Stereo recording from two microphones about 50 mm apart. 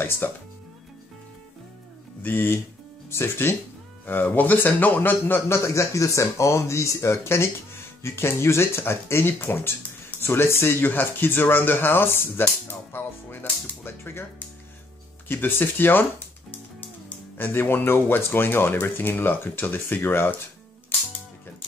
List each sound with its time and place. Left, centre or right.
0.2 s speech: left
2.2 s speech: left
4.0 s speech: left
5.5 s speech: left
10.9 s speech: left
15.2 s speech: left
17.4 s speech: left